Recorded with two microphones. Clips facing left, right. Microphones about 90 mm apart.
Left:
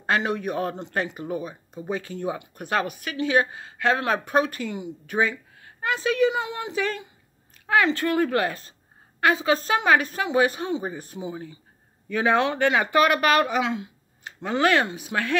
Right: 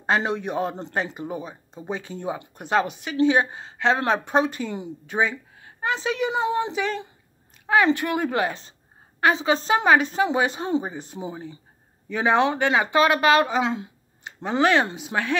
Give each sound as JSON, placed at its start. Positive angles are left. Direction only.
{"t": 0.0, "sound": "speech", "side_deg": -25}
{"t": 5.0, "sound": "a woman's voice", "side_deg": -20}